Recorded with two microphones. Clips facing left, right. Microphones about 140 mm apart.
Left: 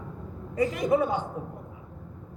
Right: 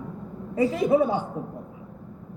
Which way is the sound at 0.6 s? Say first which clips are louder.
Right 3 dB; 25° right (ahead or behind).